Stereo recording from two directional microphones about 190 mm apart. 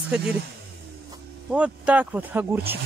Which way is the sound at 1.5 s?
5° right (ahead or behind).